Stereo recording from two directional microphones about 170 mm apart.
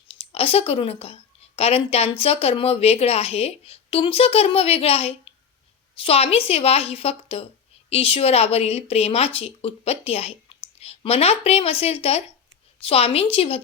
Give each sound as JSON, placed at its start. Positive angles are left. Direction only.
{"t": 0.1, "sound": "speech", "side_deg": 35}